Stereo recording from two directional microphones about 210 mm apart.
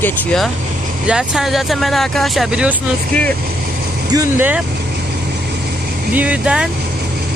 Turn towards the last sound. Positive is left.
turn(degrees=-5)  # may be behind; listen again after turning